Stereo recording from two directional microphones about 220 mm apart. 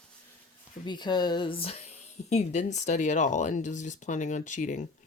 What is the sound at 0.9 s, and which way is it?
Speech, 20° left (ahead or behind).